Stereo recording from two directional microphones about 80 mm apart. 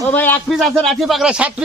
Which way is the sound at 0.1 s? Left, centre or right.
Left.